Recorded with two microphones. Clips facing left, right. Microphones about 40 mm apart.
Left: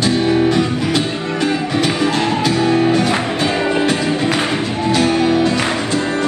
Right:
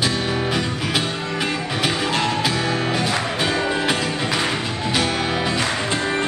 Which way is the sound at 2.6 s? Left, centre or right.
Left.